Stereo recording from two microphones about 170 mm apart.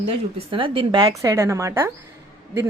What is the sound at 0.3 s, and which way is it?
A woman's voice, 30° right (ahead or behind).